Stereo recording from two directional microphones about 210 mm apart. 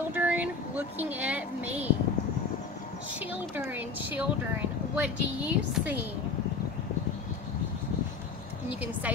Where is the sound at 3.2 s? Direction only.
10° right (ahead or behind).